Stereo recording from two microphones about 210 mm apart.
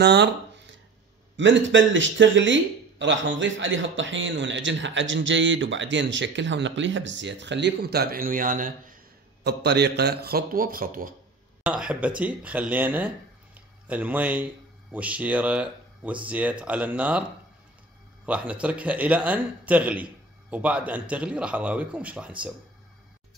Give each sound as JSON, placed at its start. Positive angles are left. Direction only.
{"t": 0.0, "sound": "a sound", "side_deg": -55}
{"t": 1.3, "sound": "speech", "side_deg": -60}
{"t": 11.6, "sound": "a man's voice", "side_deg": -5}
{"t": 18.2, "sound": "a man's voice", "side_deg": -5}